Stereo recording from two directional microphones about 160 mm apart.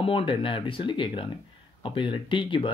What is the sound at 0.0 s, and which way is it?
Speech, 35° left (ahead or behind).